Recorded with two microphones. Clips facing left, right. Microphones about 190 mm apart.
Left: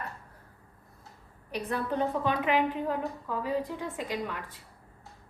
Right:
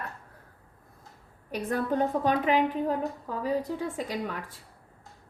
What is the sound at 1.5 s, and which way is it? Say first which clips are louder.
A woman's voice: right 3 dB; 45° right (ahead or behind).